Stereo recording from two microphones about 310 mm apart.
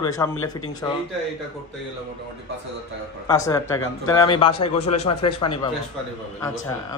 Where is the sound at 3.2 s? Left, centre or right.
Centre.